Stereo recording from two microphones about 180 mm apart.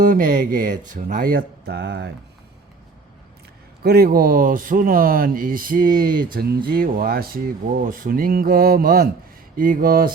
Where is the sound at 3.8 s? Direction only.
60° right (ahead or behind).